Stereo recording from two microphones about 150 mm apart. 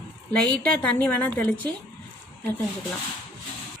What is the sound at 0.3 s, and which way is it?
A woman's voice, 10° left (ahead or behind).